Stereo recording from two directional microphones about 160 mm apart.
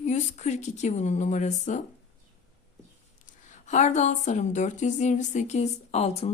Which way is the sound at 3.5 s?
50° left (ahead or behind).